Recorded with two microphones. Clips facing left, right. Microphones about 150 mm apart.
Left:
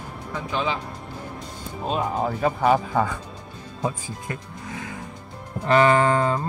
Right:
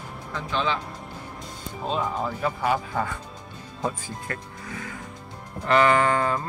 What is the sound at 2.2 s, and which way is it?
Speech, 50° left (ahead or behind).